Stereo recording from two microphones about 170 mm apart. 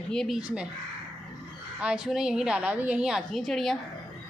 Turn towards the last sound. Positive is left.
turn(degrees=0)  # may be behind; listen again after turning